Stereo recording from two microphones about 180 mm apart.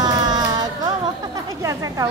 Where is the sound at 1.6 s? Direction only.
20° right (ahead or behind).